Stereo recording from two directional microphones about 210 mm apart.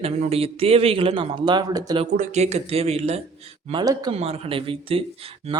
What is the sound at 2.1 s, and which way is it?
A man's voice, 30° right (ahead or behind).